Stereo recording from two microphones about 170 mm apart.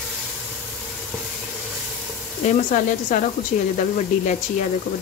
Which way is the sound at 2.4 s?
50° left (ahead or behind).